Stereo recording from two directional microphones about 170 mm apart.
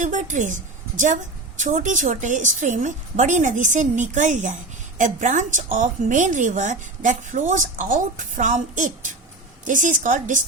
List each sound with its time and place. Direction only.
0.0 s a woman's voice: 45° right (ahead or behind)